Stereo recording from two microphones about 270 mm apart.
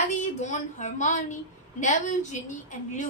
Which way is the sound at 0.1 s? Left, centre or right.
Left.